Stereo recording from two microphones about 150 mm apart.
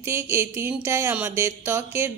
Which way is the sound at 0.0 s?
15° right (ahead or behind).